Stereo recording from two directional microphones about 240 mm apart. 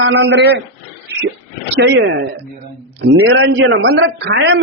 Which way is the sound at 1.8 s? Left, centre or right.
Right.